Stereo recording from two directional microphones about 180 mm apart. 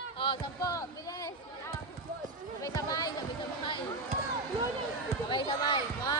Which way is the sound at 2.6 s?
20° left (ahead or behind).